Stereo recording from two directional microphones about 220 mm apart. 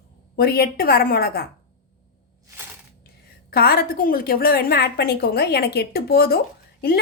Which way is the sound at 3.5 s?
45° left (ahead or behind).